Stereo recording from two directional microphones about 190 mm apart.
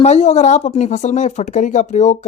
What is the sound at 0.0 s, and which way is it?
Speech, 35° left (ahead or behind).